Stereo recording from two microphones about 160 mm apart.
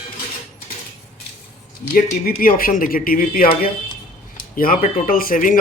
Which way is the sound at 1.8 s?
65° left (ahead or behind).